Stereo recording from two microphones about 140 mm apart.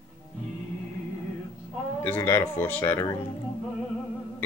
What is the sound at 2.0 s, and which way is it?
Speech, 15° left (ahead or behind).